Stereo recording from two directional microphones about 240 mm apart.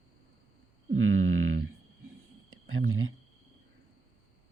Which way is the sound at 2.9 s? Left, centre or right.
Right.